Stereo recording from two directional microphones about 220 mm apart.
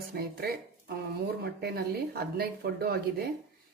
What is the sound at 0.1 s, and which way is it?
Speech, 45° right (ahead or behind).